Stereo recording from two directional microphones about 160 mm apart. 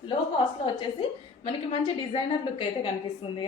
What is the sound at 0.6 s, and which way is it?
A woman's voice, 35° left (ahead or behind).